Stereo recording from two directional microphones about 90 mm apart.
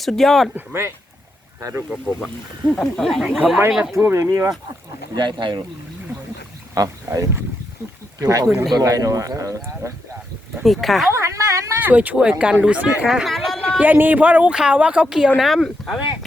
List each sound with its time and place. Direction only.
0.0 s speech: 5° left (ahead or behind)
0.5 s speech: 25° right (ahead or behind)
2.7 s speech: 5° left (ahead or behind)
3.3 s speech: 10° right (ahead or behind)
3.9 s speech: 30° right (ahead or behind)
5.1 s speech: 60° right (ahead or behind)
6.7 s speech: 35° right (ahead or behind)
10.6 s speech: centre (ahead or behind)
11.1 s speech: 30° right (ahead or behind)
11.8 s speech: 15° right (ahead or behind)
13.1 s a sound: centre (ahead or behind)
13.7 s speech: 20° right (ahead or behind); by 16.0 s centre (ahead or behind)